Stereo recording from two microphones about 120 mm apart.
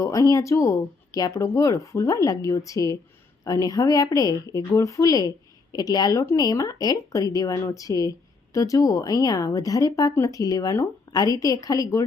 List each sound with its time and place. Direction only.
0.0 s speech: 30° left (ahead or behind)